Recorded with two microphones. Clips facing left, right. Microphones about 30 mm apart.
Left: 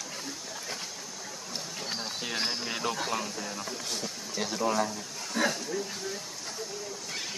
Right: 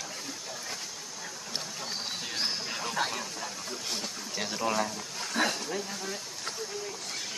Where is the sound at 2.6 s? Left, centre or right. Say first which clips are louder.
Even; centre.